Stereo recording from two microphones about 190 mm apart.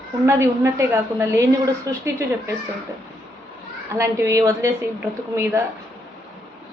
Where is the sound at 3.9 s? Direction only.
15° right (ahead or behind).